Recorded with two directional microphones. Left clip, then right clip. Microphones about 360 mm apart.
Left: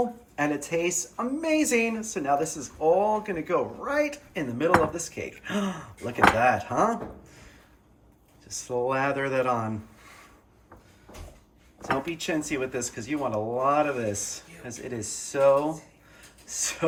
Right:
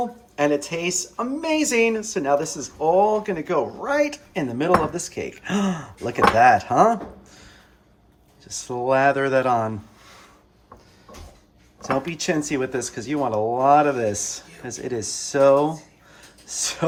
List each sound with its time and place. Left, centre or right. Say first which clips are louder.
0.3 s speech: right 5 dB; centre
8.4 s speech: right 5 dB; centre
11.8 s speech: right 4 dB; centre